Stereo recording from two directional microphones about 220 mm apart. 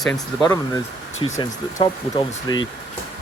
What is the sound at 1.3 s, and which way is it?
Speech, 20° left (ahead or behind).